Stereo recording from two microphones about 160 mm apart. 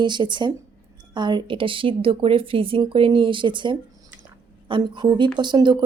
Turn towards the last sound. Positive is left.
turn(degrees=-25)  # may be behind; listen again after turning